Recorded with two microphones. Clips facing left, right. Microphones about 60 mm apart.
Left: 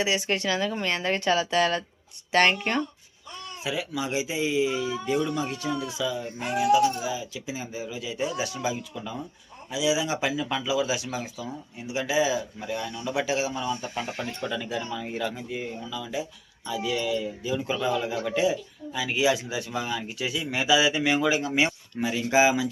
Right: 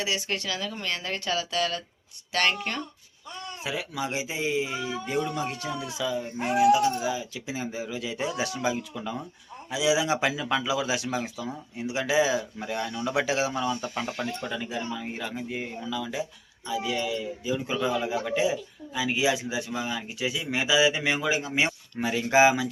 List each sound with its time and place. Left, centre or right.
0.0 s speech: left
3.6 s speech: right
6.0 s a man's voice: right
7.0 s speech: right
9.6 s speech: right
13.1 s speech: right
13.8 s speech: right
14.1 s speech: left
14.4 s a man's voice: right
15.5 s speech: right
15.9 s speech: right
16.6 s a man's voice: centre
22.0 s speech: right